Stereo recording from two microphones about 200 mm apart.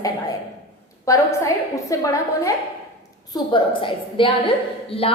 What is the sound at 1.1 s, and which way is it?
A woman's voice, 15° left (ahead or behind).